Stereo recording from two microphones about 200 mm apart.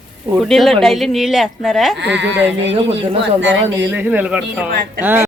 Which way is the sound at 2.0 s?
60° right (ahead or behind).